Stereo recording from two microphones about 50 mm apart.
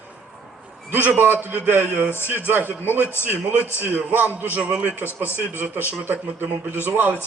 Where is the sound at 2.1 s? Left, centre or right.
Left.